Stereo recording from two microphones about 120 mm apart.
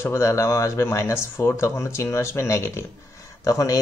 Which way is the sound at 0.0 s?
20° left (ahead or behind).